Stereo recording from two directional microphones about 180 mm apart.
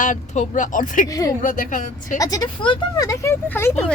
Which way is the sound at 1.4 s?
45° left (ahead or behind).